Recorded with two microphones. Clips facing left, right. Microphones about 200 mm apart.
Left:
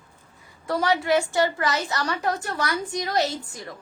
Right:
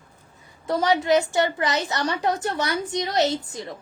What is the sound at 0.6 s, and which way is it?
A woman's voice, 20° right (ahead or behind).